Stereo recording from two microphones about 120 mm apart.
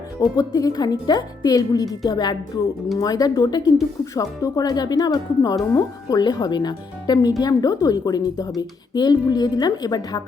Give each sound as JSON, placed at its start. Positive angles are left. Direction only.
{"t": 0.3, "sound": "speech", "side_deg": 35}